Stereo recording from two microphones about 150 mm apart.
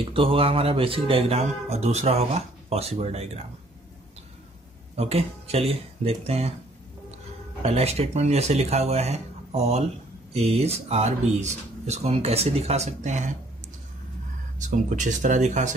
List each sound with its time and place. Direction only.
0.1 s speech: 40° right (ahead or behind)
4.9 s speech: 45° right (ahead or behind)
7.6 s speech: 45° right (ahead or behind)
14.6 s speech: 55° right (ahead or behind)